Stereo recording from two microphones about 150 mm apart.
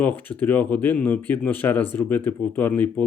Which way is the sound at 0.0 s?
10° left (ahead or behind).